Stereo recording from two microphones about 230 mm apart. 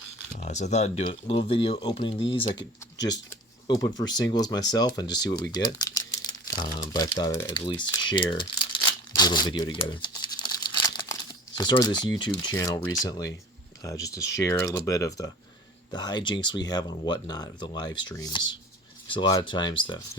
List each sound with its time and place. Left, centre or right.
0.3 s speech: left
3.7 s speech: centre